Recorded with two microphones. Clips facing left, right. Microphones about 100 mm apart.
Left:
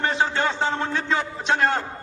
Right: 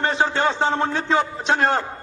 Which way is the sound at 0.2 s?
30° right (ahead or behind).